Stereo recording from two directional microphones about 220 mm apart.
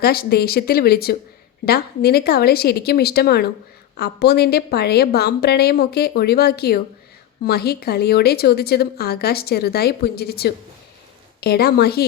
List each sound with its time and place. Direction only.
0.0 s speech: 45° left (ahead or behind)